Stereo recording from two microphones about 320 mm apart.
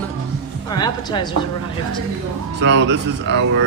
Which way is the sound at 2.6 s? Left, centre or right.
Right.